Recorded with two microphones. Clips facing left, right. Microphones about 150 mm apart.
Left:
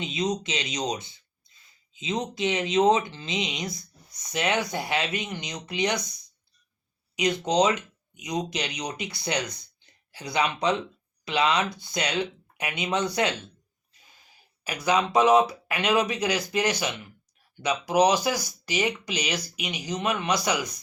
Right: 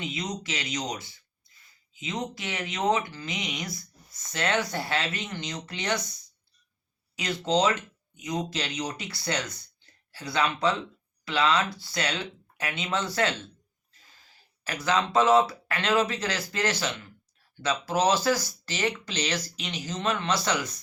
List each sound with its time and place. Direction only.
0.0 s speech: 20° left (ahead or behind)
7.2 s speech: 15° left (ahead or behind)